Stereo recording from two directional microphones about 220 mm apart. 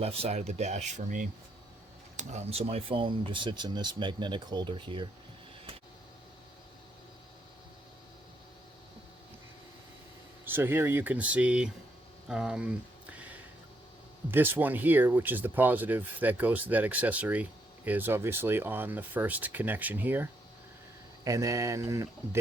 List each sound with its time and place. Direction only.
0.0 s speech: 30° right (ahead or behind)
10.4 s speech: 10° right (ahead or behind)
12.3 s a sound: 5° right (ahead or behind)
14.3 s speech: 10° right (ahead or behind)